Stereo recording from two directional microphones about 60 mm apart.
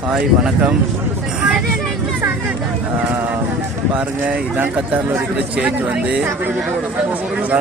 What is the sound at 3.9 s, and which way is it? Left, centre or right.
Speech, right.